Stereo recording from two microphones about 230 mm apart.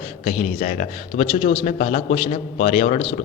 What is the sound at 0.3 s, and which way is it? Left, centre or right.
A man's voice, left.